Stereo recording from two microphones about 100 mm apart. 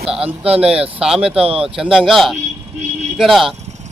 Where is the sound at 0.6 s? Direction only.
10° right (ahead or behind).